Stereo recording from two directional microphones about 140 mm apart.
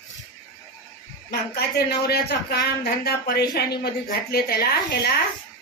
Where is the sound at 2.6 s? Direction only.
90° left.